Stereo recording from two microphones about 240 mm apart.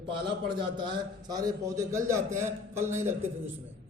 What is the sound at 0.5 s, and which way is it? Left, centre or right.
A man's voice, centre.